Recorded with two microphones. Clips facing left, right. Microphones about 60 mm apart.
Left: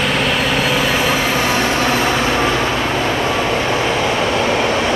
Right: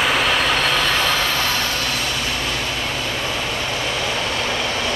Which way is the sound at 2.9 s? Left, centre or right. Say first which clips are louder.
Left 7 dB; left.